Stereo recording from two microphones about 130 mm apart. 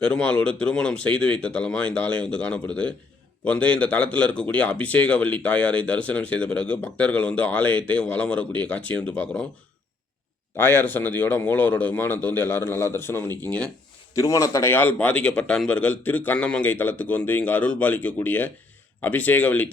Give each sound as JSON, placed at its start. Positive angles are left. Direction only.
{"t": 0.0, "sound": "speech", "side_deg": 10}
{"t": 10.6, "sound": "speech", "side_deg": 15}
{"t": 14.1, "sound": "a man's voice", "side_deg": 25}
{"t": 14.7, "sound": "speech", "side_deg": 15}